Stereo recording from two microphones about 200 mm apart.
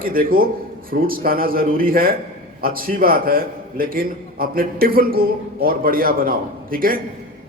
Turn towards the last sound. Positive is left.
turn(degrees=-45)  # may be behind; listen again after turning